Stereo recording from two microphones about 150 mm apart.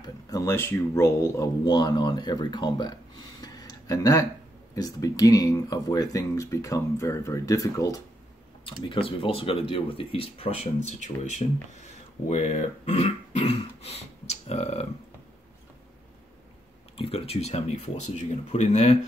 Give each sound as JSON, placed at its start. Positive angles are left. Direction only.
{"t": 0.0, "sound": "speech", "side_deg": 20}
{"t": 1.7, "sound": "speech", "side_deg": 30}
{"t": 8.8, "sound": "speech", "side_deg": 35}
{"t": 16.9, "sound": "speech", "side_deg": 40}